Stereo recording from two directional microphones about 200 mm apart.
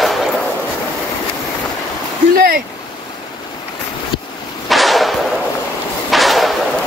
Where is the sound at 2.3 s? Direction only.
50° right (ahead or behind).